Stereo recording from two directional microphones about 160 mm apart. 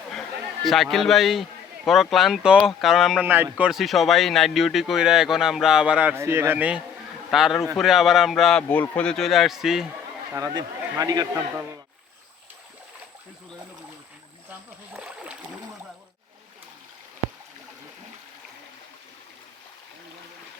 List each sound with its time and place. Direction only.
0.1 s a man's voice: centre (ahead or behind)
10.3 s a man's voice: 25° right (ahead or behind)
14.9 s rowboat: 10° right (ahead or behind)